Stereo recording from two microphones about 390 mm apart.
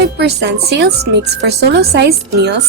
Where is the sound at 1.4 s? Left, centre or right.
Right.